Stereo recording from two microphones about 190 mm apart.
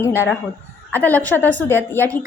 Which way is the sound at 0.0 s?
15° left (ahead or behind).